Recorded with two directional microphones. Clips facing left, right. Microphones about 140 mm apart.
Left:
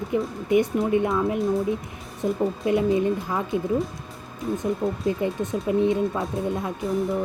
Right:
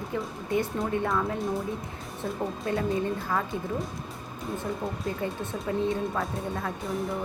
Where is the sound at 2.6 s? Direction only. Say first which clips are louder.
Left 6 dB; 20° left (ahead or behind).